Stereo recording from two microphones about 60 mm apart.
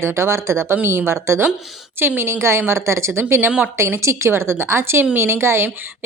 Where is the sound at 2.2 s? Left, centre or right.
Right.